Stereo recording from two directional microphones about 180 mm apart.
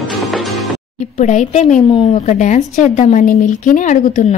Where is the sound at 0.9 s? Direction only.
40° left (ahead or behind).